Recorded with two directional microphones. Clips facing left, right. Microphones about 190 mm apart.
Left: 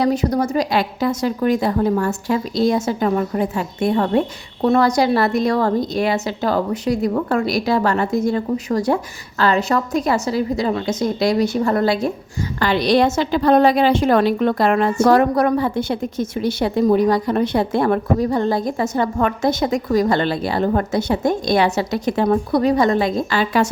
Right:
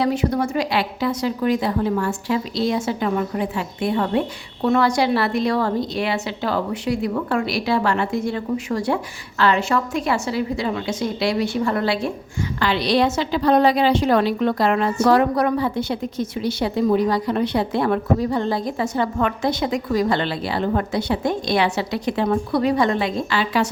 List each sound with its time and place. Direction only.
0.0 s a woman's voice: 40° left (ahead or behind)